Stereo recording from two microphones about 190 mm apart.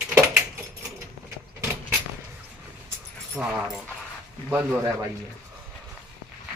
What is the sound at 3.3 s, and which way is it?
Speech, 5° right (ahead or behind).